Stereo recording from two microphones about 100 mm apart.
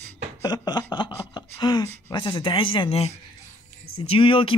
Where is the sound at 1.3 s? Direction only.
45° left (ahead or behind).